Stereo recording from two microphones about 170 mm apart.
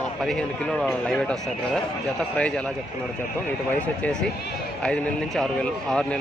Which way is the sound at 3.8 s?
5° left (ahead or behind).